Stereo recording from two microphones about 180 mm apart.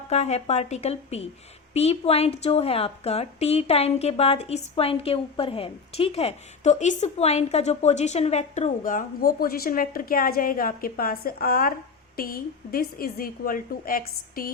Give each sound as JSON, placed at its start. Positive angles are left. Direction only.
{"t": 0.1, "sound": "a woman's voice", "side_deg": 35}